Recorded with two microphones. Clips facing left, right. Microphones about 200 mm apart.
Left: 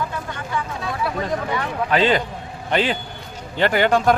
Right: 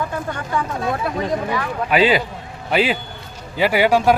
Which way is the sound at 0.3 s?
50° right (ahead or behind).